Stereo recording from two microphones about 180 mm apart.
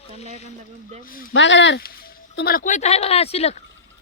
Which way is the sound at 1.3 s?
90° left.